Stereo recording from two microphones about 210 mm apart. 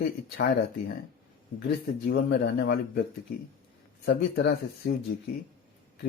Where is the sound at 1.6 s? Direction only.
50° left (ahead or behind).